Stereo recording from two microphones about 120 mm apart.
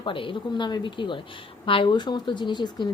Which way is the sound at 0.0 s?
45° left (ahead or behind).